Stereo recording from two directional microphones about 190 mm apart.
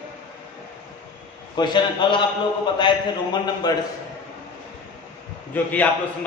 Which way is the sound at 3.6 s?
20° left (ahead or behind).